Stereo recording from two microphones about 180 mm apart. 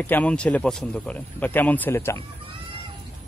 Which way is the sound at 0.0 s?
10° left (ahead or behind).